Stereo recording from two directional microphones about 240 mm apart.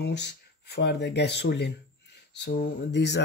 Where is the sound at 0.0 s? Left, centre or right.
Left.